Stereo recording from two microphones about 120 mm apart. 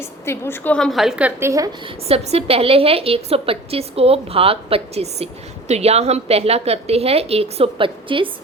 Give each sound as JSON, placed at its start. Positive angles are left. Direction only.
{"t": 0.3, "sound": "a woman's voice", "side_deg": 20}
{"t": 0.8, "sound": "a woman's voice", "side_deg": 0}
{"t": 1.4, "sound": "a woman's voice", "side_deg": -25}
{"t": 2.0, "sound": "a woman's voice", "side_deg": -55}